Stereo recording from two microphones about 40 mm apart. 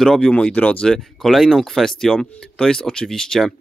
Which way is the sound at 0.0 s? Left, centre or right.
Centre.